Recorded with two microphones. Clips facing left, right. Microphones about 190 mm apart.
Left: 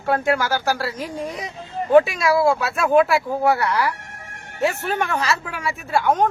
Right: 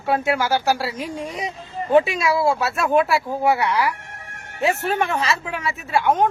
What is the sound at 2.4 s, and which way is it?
Speech, centre (ahead or behind).